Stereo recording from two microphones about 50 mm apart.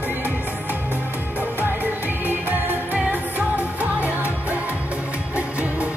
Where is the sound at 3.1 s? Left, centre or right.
Right.